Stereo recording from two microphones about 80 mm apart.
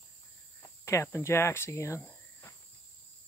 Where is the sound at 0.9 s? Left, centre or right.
Left.